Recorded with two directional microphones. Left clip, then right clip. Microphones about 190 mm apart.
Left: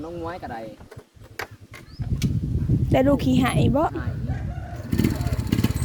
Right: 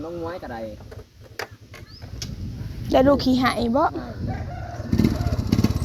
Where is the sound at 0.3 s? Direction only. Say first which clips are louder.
Even; 30° left (ahead or behind).